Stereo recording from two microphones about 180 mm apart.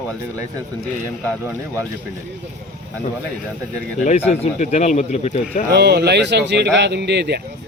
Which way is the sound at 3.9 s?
40° left (ahead or behind).